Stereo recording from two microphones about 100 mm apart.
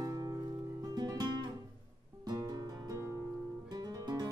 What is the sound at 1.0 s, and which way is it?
Guitar, 45° right (ahead or behind).